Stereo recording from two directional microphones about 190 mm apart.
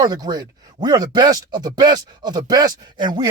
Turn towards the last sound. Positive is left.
turn(degrees=-25)  # may be behind; listen again after turning